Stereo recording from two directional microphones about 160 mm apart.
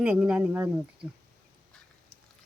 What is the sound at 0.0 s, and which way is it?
Speech, 5° right (ahead or behind).